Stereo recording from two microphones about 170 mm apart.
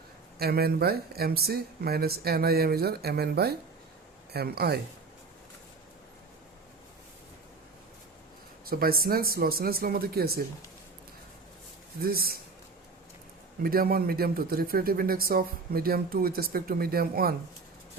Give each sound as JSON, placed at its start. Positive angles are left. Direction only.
{"t": 0.3, "sound": "speech", "side_deg": -65}
{"t": 8.6, "sound": "speech", "side_deg": -60}
{"t": 12.0, "sound": "speech", "side_deg": -60}
{"t": 13.6, "sound": "speech", "side_deg": -60}